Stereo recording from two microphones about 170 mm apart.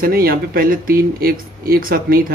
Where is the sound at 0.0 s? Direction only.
60° right (ahead or behind).